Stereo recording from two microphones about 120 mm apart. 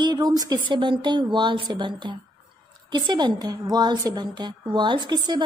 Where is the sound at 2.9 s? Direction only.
35° right (ahead or behind).